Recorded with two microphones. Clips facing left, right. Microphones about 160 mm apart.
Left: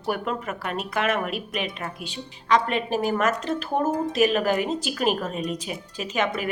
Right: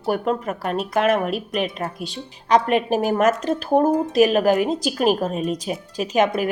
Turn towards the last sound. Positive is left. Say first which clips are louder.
# right 7 dB
turn(degrees=-45)  # may be behind; listen again after turning